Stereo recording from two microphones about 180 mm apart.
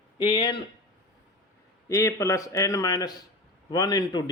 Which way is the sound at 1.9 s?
15° left (ahead or behind).